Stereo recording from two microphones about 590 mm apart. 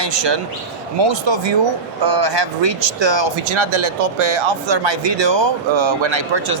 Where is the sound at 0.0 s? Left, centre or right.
Right.